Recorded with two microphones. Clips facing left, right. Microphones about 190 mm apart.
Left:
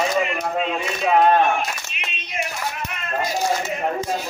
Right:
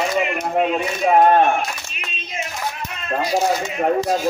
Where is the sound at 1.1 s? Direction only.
45° right (ahead or behind).